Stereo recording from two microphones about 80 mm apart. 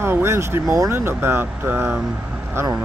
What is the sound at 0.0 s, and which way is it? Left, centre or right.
Speech, right.